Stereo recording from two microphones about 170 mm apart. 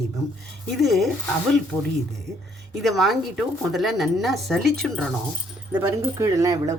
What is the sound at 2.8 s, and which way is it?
Speech, centre (ahead or behind).